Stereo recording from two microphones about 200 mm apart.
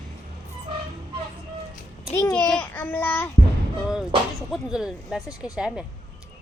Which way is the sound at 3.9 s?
Centre (ahead or behind).